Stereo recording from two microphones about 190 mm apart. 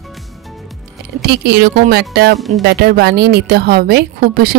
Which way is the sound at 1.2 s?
60° right (ahead or behind).